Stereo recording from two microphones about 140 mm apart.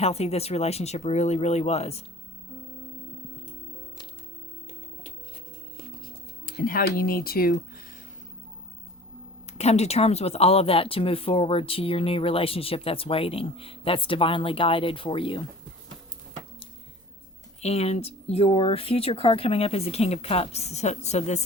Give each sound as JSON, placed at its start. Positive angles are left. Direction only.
{"t": 0.0, "sound": "speech", "side_deg": 50}
{"t": 6.4, "sound": "speech", "side_deg": 90}
{"t": 9.5, "sound": "speech", "side_deg": 50}
{"t": 17.6, "sound": "speech", "side_deg": 50}